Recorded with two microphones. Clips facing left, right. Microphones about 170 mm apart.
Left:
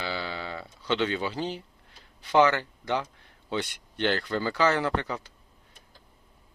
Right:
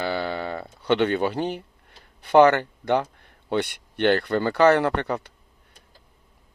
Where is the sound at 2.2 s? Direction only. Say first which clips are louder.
Right 6 dB; 55° right (ahead or behind).